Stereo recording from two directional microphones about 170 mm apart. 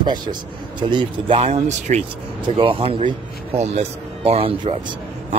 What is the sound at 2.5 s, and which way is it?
Speech, 30° right (ahead or behind).